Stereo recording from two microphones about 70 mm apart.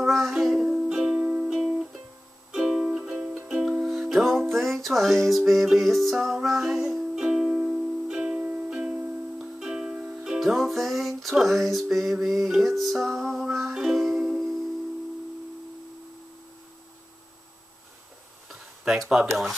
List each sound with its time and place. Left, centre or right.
0.1 s music: centre
8.4 s music: right
10.4 s music: centre
18.5 s speech: centre